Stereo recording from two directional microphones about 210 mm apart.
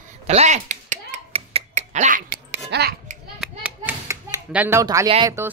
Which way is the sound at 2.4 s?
50° right (ahead or behind).